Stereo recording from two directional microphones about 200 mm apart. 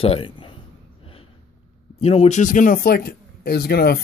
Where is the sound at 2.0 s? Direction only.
30° left (ahead or behind).